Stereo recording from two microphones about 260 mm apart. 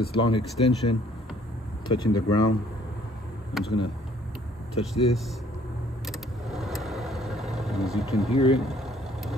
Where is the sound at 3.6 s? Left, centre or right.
Centre.